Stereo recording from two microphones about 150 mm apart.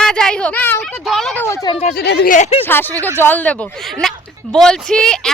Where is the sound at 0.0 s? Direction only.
5° left (ahead or behind).